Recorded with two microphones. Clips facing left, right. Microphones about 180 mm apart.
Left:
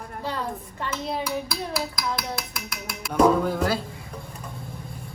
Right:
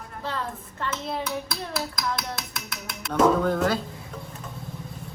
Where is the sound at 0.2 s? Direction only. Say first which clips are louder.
Left 2 dB; 10° left (ahead or behind).